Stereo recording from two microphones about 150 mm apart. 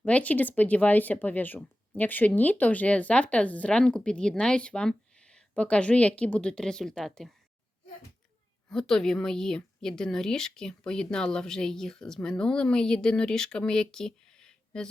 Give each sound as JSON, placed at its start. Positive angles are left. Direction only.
{"t": 0.0, "sound": "speech", "side_deg": 10}
{"t": 8.7, "sound": "a woman's voice", "side_deg": 5}